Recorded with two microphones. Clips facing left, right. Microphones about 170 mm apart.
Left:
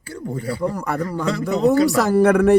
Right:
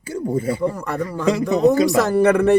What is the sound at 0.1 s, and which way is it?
A man's voice, 20° right (ahead or behind).